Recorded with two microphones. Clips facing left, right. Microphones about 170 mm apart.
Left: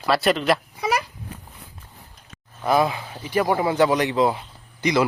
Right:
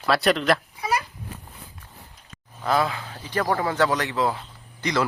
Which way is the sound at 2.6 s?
15° left (ahead or behind).